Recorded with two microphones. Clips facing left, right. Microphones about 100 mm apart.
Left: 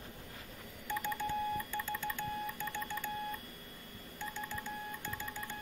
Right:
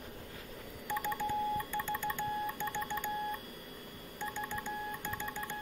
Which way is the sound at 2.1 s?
20° right (ahead or behind).